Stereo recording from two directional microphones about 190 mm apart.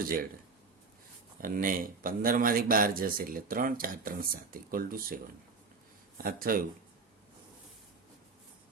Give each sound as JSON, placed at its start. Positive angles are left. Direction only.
{"t": 1.4, "sound": "speech", "side_deg": -45}